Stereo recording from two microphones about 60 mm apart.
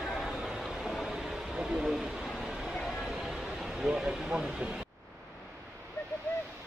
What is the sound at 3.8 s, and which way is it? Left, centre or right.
Speech, centre.